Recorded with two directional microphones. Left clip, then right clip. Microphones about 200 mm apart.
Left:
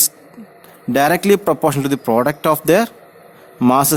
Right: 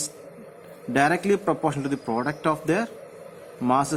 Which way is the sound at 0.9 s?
50° left (ahead or behind).